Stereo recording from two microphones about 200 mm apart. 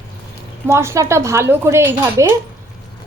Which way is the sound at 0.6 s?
15° right (ahead or behind).